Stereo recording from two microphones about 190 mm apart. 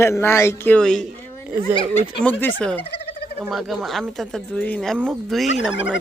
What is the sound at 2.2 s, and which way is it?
A man's voice, 5° left (ahead or behind).